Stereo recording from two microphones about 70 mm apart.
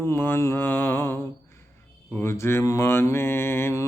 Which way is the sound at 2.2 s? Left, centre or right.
Left.